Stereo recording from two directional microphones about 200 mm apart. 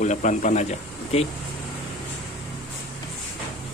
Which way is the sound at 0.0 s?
35° left (ahead or behind).